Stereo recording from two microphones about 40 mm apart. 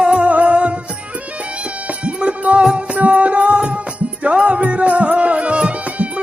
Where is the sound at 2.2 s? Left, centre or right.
Right.